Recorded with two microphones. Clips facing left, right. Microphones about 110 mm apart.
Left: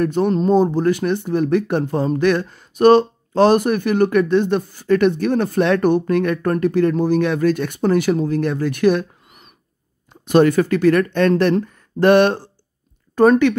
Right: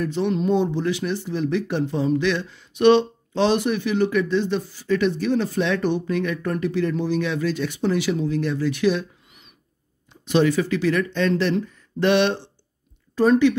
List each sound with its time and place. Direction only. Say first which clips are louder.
0.0 s speech: left 5 dB; 50° left (ahead or behind)